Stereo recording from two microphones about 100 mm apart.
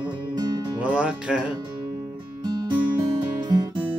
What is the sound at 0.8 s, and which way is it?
Music, 10° right (ahead or behind).